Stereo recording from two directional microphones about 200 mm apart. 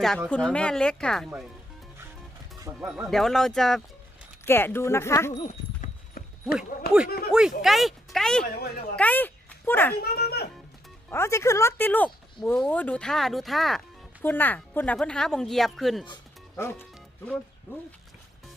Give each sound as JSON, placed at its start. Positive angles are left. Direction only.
{"t": 0.0, "sound": "speech", "side_deg": 0}
{"t": 2.7, "sound": "speech", "side_deg": -10}
{"t": 3.1, "sound": "speech", "side_deg": 0}
{"t": 6.2, "sound": "clip-clop", "side_deg": 50}
{"t": 6.8, "sound": "speech", "side_deg": 50}
{"t": 7.3, "sound": "speech", "side_deg": -5}
{"t": 10.0, "sound": "a sound", "side_deg": 55}
{"t": 11.1, "sound": "speech", "side_deg": 15}
{"t": 16.6, "sound": "speech", "side_deg": 10}